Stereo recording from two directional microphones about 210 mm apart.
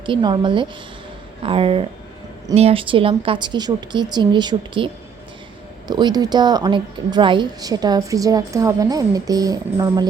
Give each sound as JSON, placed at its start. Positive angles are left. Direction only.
{"t": 0.0, "sound": "a woman's voice", "side_deg": -20}
{"t": 5.9, "sound": "a woman's voice", "side_deg": -20}